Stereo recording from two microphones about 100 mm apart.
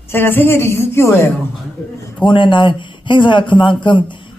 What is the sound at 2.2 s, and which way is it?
A man's voice, 50° left (ahead or behind).